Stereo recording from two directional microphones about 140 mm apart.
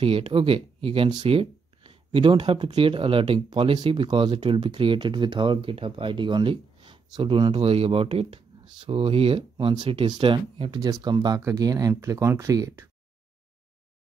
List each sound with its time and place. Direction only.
0.0 s speech: 40° right (ahead or behind); by 12.9 s 20° right (ahead or behind)